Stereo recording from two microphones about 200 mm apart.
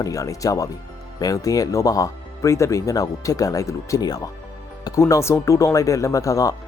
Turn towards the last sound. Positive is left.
turn(degrees=15)  # may be behind; listen again after turning